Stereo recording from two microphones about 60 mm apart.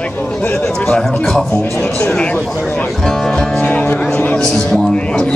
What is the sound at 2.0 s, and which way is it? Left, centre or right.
Speech, centre.